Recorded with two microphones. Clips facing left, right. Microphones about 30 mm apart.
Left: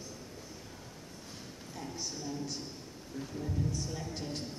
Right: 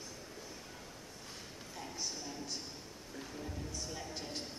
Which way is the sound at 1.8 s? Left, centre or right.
Centre.